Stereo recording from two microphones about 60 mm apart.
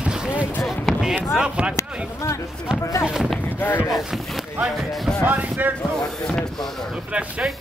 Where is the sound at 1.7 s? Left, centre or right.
Left.